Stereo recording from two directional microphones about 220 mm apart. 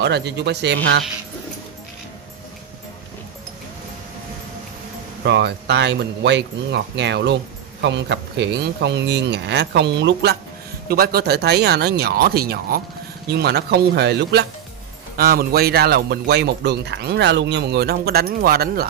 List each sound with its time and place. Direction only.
0.0 s speech: 50° right (ahead or behind)
5.2 s speech: 50° right (ahead or behind)